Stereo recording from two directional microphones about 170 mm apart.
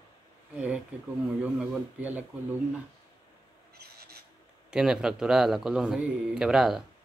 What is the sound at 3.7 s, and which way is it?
Filing, 65° right (ahead or behind).